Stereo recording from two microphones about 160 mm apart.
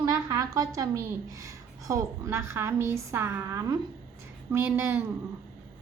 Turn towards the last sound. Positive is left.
turn(degrees=-15)  # may be behind; listen again after turning